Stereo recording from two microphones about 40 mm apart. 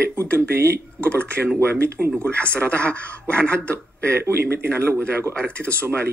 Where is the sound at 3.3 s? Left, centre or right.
Right.